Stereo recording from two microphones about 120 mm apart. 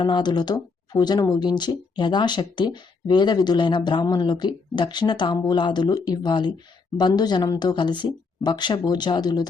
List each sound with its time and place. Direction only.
0.0 s speech: 35° left (ahead or behind)